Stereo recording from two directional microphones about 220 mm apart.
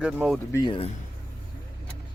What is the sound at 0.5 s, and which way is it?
Speech, 20° left (ahead or behind).